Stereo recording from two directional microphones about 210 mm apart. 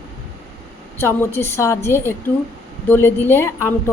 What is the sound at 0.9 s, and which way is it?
A woman's voice, 10° left (ahead or behind).